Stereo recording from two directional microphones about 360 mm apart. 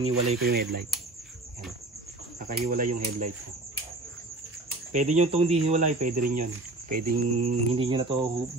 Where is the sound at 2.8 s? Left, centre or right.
Right.